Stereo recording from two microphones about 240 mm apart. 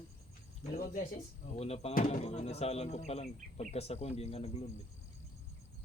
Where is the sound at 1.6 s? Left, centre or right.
Left.